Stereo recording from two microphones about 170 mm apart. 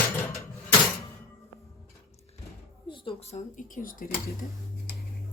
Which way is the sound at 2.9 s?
30° left (ahead or behind).